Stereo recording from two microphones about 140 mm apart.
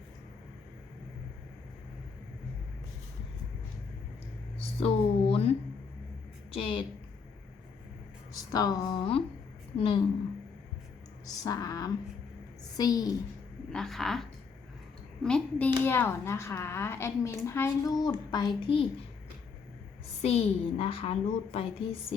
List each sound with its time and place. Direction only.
4.8 s a sound: 45° left (ahead or behind)
6.5 s a woman's voice: 40° left (ahead or behind)
8.5 s a woman's voice: 25° left (ahead or behind)
11.4 s a woman's voice: 25° left (ahead or behind)
13.7 s a woman's voice: centre (ahead or behind); by 18.9 s 35° left (ahead or behind)
20.2 s a woman's voice: 45° left (ahead or behind)